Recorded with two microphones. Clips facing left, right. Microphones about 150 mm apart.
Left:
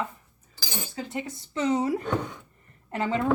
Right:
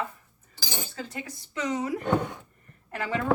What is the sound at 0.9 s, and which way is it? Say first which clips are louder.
A woman's voice: left 4 dB; 20° left (ahead or behind).